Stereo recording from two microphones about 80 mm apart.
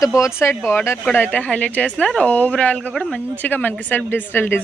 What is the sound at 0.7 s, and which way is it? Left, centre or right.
A woman's voice, left.